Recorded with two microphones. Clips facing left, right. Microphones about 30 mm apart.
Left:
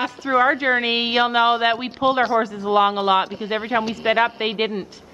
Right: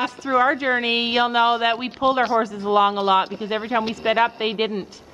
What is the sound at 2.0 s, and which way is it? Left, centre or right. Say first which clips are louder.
Speech: even; left.